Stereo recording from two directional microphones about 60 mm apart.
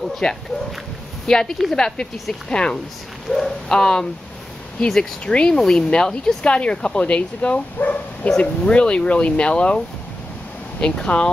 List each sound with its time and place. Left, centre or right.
0.1 s a woman's voice: centre
10.8 s speech: centre